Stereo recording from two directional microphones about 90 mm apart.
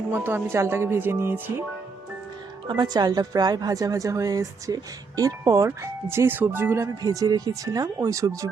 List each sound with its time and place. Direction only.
0.3 s speech: 25° right (ahead or behind)
2.6 s a woman's voice: 55° right (ahead or behind); by 6.7 s 25° right (ahead or behind)
7.0 s a woman's voice: 40° right (ahead or behind)